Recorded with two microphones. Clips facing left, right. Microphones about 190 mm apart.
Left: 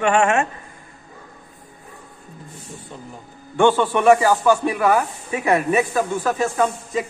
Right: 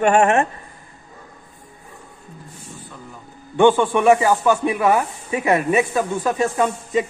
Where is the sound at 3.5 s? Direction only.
15° right (ahead or behind).